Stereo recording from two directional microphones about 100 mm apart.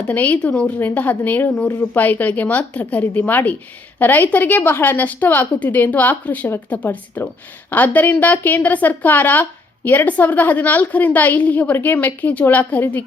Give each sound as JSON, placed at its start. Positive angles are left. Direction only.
{"t": 0.1, "sound": "a woman's voice", "side_deg": 15}